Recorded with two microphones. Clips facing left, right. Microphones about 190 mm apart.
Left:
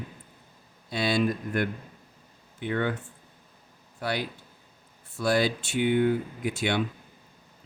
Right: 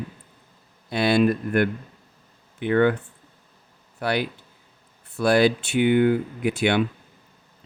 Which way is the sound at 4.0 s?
65° right (ahead or behind).